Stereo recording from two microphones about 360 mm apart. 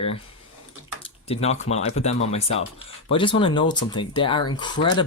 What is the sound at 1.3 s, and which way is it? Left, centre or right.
Speech, centre.